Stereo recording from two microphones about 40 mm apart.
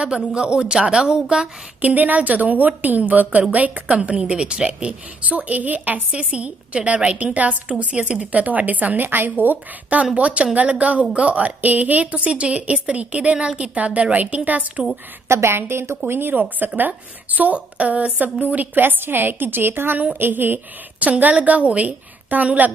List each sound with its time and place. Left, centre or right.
0.2 s speech: right
1.8 s a woman's voice: right
6.3 s a woman's voice: right
10.1 s a woman's voice: right
15.2 s a woman's voice: right
16.1 s speech: right
16.3 s speech: right
17.4 s a woman's voice: right
18.8 s a woman's voice: right
21.0 s a woman's voice: right